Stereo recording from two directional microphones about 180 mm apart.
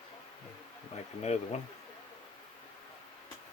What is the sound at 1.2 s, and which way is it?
Speech, 40° left (ahead or behind).